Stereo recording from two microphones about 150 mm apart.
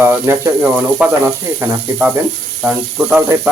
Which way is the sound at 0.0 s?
15° right (ahead or behind).